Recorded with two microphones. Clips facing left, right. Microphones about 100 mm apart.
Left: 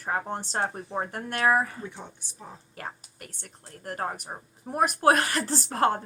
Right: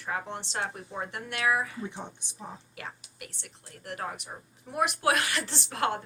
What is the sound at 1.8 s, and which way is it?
Speech, 20° right (ahead or behind).